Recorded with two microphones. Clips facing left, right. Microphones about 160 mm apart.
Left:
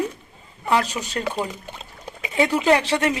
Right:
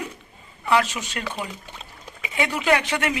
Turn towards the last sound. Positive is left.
turn(degrees=35)  # may be behind; listen again after turning